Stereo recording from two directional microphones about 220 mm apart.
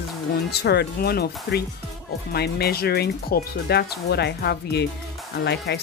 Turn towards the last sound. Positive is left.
turn(degrees=50)  # may be behind; listen again after turning